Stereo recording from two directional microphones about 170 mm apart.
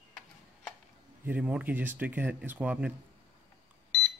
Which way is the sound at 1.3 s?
5° right (ahead or behind).